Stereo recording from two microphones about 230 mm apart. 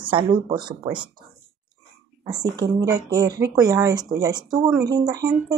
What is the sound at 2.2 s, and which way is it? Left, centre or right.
Speech, centre.